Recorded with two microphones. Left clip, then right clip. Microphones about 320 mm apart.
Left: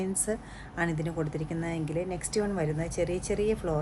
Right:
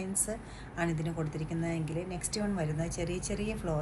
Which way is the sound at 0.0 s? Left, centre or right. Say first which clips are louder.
Left 5 dB; left.